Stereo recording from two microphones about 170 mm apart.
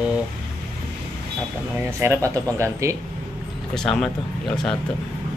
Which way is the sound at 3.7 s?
5° left (ahead or behind).